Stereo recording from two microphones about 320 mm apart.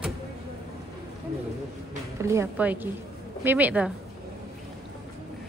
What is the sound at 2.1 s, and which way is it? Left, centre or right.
Speech, centre.